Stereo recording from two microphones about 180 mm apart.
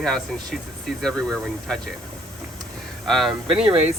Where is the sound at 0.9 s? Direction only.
5° left (ahead or behind).